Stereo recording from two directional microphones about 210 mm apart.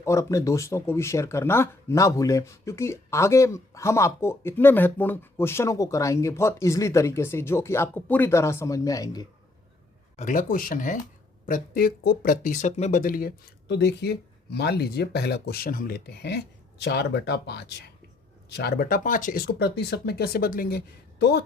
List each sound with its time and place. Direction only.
0.0 s speech: 15° left (ahead or behind)
10.2 s speech: 40° left (ahead or behind)